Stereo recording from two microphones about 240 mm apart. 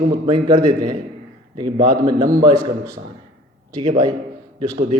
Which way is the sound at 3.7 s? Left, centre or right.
Centre.